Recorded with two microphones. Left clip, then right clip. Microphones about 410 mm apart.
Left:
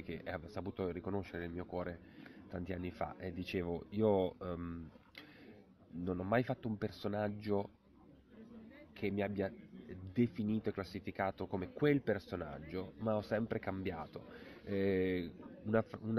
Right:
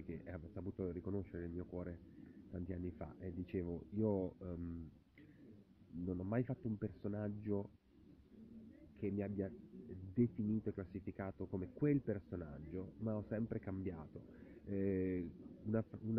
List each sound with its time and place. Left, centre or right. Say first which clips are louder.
0.0 s speech: left 7 dB; left
6.0 s speech: left 7 dB; left
9.0 s speech: left 6 dB; left